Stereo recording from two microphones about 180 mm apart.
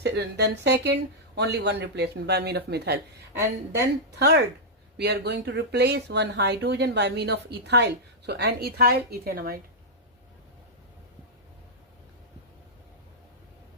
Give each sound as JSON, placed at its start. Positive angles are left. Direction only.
{"t": 0.0, "sound": "speech", "side_deg": -70}